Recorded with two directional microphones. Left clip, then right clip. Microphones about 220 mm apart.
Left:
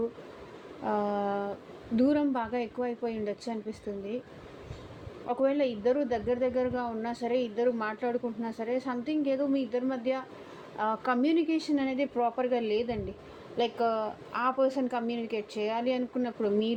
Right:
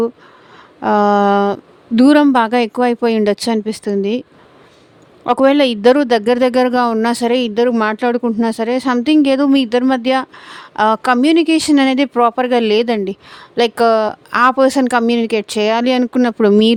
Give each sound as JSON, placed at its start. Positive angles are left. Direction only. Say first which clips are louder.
{"t": 0.8, "sound": "speech", "louder": "right 18 dB", "side_deg": -45}
{"t": 5.2, "sound": "speech", "louder": "right 16 dB", "side_deg": -50}